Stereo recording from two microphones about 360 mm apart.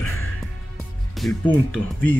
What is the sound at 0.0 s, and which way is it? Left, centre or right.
Music, left.